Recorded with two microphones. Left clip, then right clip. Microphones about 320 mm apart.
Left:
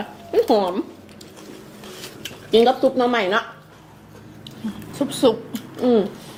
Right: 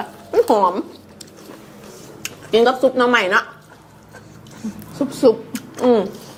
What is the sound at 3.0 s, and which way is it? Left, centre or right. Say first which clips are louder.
Speech: right 4 dB; right.